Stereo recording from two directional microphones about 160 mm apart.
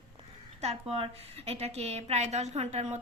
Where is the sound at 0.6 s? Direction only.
40° right (ahead or behind).